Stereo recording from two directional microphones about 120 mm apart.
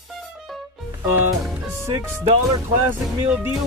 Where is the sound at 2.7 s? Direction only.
15° right (ahead or behind).